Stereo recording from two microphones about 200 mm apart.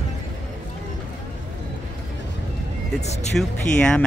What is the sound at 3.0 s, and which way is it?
Speech, 35° left (ahead or behind).